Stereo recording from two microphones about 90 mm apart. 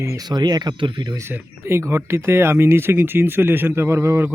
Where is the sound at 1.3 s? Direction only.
25° right (ahead or behind).